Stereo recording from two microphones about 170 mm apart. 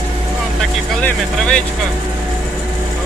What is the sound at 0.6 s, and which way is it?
Speech, 5° left (ahead or behind).